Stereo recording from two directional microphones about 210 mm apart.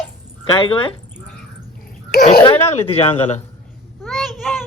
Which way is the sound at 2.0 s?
40° left (ahead or behind).